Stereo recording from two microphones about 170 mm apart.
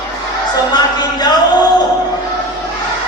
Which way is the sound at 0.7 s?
25° left (ahead or behind).